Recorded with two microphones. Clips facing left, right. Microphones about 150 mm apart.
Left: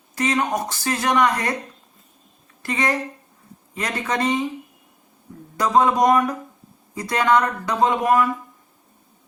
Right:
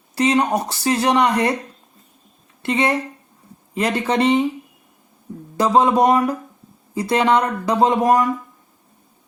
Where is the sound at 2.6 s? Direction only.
25° right (ahead or behind).